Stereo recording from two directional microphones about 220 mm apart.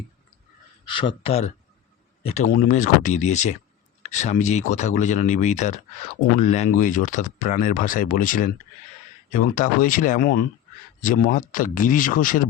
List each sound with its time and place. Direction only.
0.9 s a man's voice: 20° left (ahead or behind); by 12.4 s 40° left (ahead or behind)